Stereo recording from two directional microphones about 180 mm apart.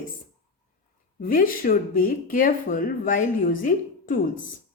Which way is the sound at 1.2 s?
50° left (ahead or behind).